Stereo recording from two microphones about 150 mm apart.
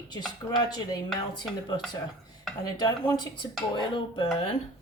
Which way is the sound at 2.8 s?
30° left (ahead or behind).